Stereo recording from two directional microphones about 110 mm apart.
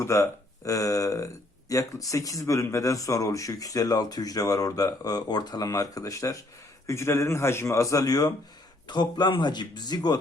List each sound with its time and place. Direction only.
0.0 s a man's voice: 25° left (ahead or behind)